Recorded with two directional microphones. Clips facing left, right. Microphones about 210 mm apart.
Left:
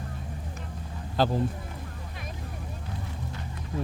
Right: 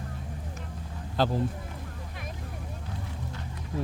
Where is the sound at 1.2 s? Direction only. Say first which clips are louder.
Left 1 dB; 10° left (ahead or behind).